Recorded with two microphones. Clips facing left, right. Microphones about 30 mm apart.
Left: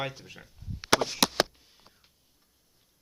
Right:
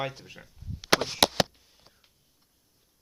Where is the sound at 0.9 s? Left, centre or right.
Centre.